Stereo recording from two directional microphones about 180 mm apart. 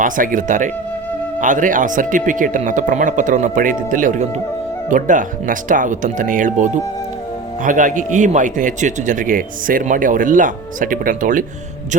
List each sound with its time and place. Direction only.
0.0 s speech: 50° right (ahead or behind)